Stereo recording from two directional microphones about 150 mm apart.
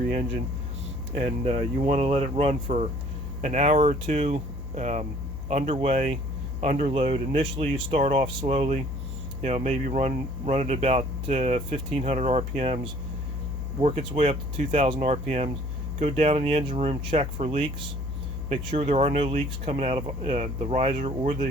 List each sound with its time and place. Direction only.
1.1 s speech: 50° right (ahead or behind)
13.8 s speech: 40° right (ahead or behind)
18.7 s speech: 40° right (ahead or behind); by 21.4 s 60° right (ahead or behind)